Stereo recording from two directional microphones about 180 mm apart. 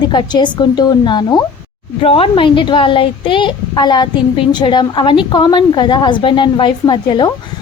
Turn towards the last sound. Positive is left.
turn(degrees=25)  # may be behind; listen again after turning